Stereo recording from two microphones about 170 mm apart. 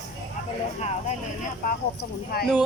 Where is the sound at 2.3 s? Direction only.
70° left (ahead or behind).